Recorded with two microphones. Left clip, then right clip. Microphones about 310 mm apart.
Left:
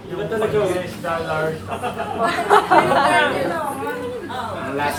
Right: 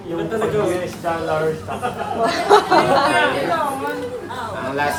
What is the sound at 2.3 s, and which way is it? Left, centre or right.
Speech, centre.